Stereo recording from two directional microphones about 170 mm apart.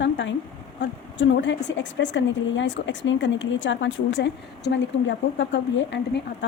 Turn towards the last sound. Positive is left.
turn(degrees=90)